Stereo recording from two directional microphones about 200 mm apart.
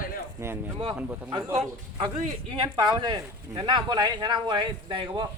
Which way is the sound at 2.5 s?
25° right (ahead or behind).